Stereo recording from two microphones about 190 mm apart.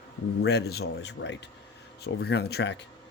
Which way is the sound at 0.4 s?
60° left (ahead or behind).